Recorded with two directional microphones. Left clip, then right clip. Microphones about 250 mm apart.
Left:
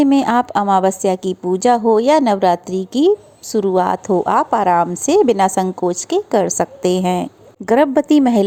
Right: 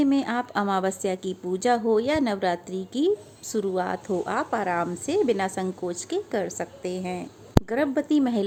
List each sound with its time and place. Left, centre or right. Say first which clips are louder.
0.0 s a woman's voice: left 11 dB; left